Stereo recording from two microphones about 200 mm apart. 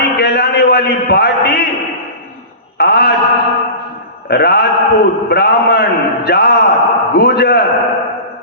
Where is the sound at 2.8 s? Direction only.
55° left (ahead or behind).